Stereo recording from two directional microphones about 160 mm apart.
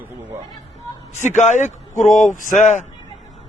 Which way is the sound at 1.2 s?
45° left (ahead or behind).